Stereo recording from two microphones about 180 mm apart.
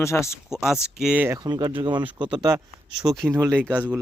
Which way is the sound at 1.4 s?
20° right (ahead or behind).